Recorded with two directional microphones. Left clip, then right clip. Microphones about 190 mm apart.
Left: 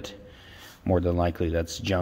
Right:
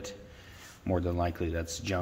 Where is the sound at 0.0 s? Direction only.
50° left (ahead or behind).